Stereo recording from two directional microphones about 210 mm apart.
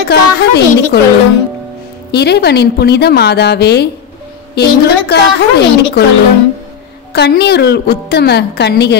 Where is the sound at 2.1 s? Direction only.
50° left (ahead or behind).